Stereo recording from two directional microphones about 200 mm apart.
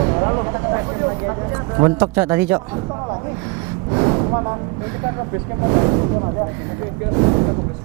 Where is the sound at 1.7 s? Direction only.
20° right (ahead or behind).